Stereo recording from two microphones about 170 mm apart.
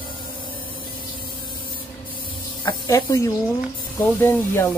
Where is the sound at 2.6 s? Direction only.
20° left (ahead or behind).